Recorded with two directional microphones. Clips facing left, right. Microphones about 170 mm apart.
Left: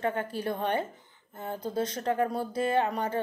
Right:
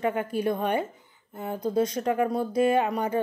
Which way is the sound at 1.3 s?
10° right (ahead or behind).